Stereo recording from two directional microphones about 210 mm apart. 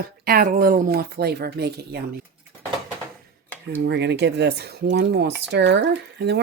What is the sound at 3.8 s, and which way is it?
Speech, 55° right (ahead or behind).